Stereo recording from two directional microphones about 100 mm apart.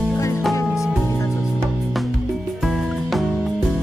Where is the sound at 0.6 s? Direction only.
30° left (ahead or behind).